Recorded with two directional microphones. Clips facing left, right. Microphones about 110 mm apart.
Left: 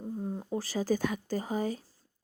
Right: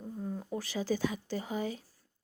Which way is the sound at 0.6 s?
40° left (ahead or behind).